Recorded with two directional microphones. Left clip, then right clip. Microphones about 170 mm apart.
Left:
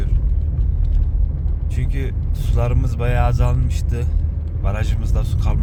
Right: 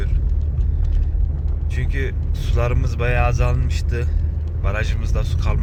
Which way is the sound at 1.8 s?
10° left (ahead or behind).